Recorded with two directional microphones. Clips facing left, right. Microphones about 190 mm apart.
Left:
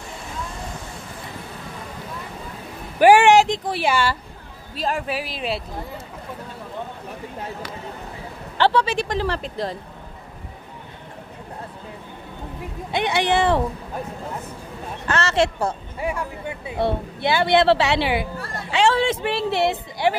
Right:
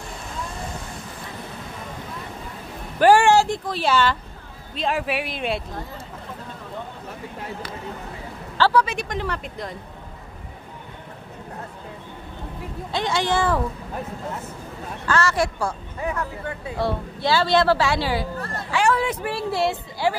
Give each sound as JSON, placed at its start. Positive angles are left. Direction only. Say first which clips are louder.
{"t": 3.0, "sound": "a sound", "louder": "left 2 dB", "side_deg": 15}
{"t": 3.6, "sound": "speech", "louder": "even", "side_deg": 15}
{"t": 4.7, "sound": "speech", "louder": "right 1 dB", "side_deg": 0}
{"t": 8.5, "sound": "speech", "louder": "left 1 dB", "side_deg": 25}
{"t": 13.2, "sound": "a woman's voice", "louder": "left 3 dB", "side_deg": 20}
{"t": 15.0, "sound": "a woman's voice", "louder": "left 1 dB", "side_deg": 25}
{"t": 16.0, "sound": "speech", "louder": "even", "side_deg": 10}
{"t": 16.7, "sound": "a woman's voice", "louder": "left 3 dB", "side_deg": 20}